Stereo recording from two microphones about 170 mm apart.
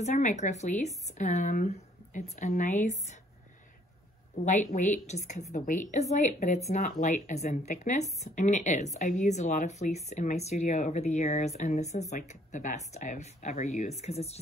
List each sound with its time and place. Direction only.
0.0 s a woman's voice: 45° left (ahead or behind)
4.5 s a woman's voice: 45° left (ahead or behind)